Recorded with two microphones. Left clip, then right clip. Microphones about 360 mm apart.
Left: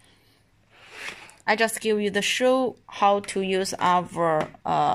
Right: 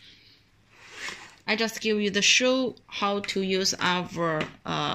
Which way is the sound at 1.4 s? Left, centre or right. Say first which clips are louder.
Left 5 dB; left.